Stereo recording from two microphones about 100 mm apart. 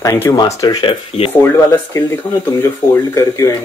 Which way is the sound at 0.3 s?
25° left (ahead or behind).